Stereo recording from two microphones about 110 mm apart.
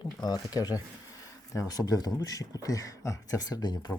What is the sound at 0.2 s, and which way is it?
Speech, 40° left (ahead or behind).